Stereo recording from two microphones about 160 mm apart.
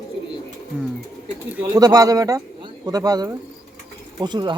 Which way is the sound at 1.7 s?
25° right (ahead or behind).